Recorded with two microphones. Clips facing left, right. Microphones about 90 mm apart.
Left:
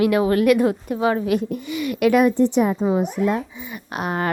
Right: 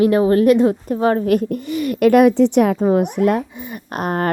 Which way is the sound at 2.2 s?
80° right.